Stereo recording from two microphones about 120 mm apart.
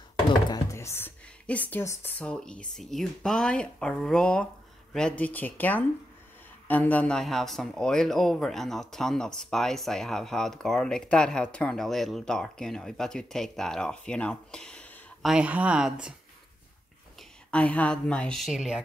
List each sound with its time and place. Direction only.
0.7 s speech: 20° left (ahead or behind)
15.2 s speech: 10° right (ahead or behind)
17.5 s speech: 10° left (ahead or behind)